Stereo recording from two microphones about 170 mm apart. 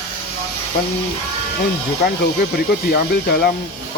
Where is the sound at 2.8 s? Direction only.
65° left (ahead or behind).